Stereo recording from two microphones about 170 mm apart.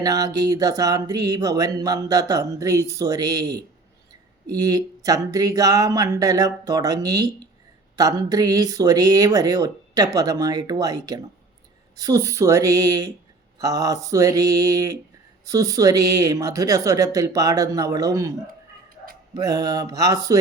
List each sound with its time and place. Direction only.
0.0 s speech: 20° right (ahead or behind)
19.4 s speech: 20° right (ahead or behind)